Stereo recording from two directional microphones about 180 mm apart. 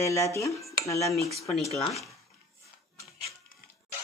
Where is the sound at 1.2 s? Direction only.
Centre (ahead or behind).